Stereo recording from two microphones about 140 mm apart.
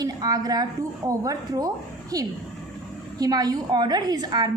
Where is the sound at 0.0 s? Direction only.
25° right (ahead or behind).